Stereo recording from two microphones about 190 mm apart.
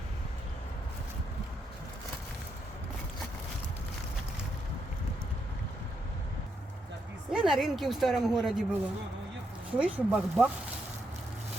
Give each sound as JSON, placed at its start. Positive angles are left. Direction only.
{"t": 7.3, "sound": "speech", "side_deg": -5}
{"t": 9.7, "sound": "speech", "side_deg": -5}